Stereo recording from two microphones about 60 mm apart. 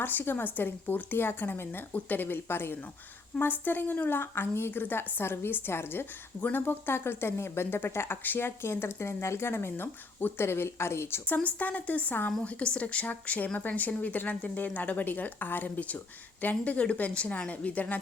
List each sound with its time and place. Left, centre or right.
0.0 s a woman's voice: left
11.4 s speech: left